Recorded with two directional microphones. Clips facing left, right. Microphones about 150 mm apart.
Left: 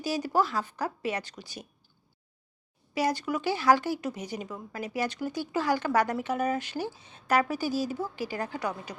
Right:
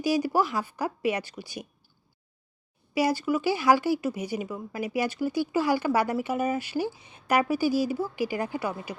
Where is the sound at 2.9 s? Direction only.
10° right (ahead or behind).